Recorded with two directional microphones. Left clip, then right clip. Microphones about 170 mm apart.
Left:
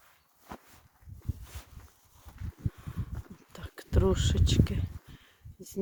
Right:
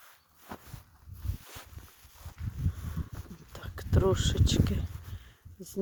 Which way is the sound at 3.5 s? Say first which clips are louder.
Right 1 dB; 10° left (ahead or behind).